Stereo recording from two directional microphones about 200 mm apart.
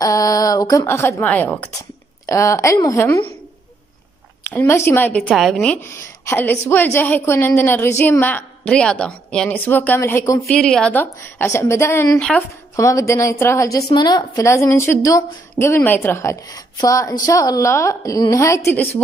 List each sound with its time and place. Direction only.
0.0 s speech: 15° left (ahead or behind)
4.4 s speech: 10° left (ahead or behind)
10.5 s speech: 5° left (ahead or behind)